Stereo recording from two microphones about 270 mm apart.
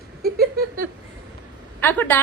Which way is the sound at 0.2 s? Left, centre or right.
Right.